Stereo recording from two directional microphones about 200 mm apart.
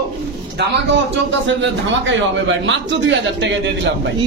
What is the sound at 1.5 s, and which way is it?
A man's voice, 65° right (ahead or behind).